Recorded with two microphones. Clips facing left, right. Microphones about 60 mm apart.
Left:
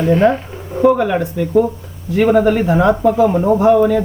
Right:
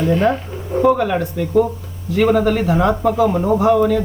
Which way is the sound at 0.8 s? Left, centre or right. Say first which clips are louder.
Left 2 dB; centre.